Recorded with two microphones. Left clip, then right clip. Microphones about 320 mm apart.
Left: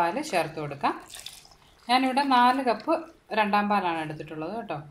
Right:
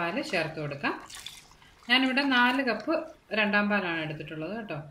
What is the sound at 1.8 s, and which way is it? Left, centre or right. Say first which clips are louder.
A woman's voice: left 2 dB; centre.